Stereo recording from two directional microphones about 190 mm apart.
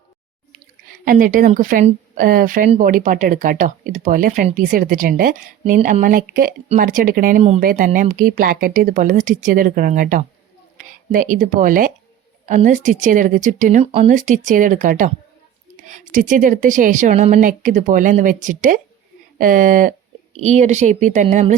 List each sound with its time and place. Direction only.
1.0 s a woman's voice: 45° right (ahead or behind)